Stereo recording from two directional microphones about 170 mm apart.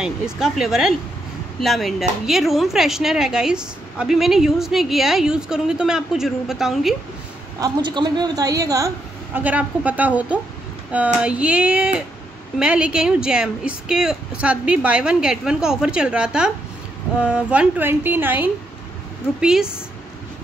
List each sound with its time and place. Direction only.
0.0 s speech: 5° right (ahead or behind)
7.6 s a woman's voice: 25° right (ahead or behind); by 19.7 s 5° right (ahead or behind)